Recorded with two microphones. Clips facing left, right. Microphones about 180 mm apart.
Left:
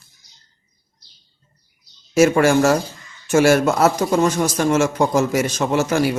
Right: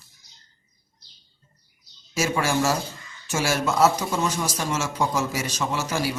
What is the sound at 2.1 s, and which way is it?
A man's voice, 55° left (ahead or behind).